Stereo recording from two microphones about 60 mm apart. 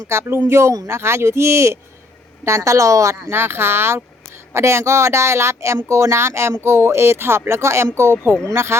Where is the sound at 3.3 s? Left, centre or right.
Right.